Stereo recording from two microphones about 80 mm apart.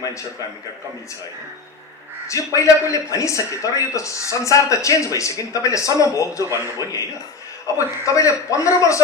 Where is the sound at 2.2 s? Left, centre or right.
Left.